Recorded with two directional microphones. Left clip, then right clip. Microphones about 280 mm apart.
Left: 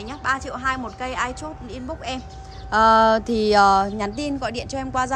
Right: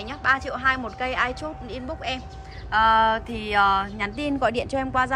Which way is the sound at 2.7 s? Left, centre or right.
Left.